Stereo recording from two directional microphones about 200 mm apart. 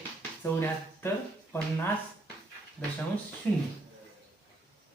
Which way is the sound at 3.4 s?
10° left (ahead or behind).